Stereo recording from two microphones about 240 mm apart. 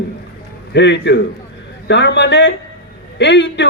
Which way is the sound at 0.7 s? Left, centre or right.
Left.